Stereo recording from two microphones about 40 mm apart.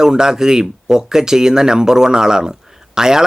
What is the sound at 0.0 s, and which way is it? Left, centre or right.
A man's voice, centre.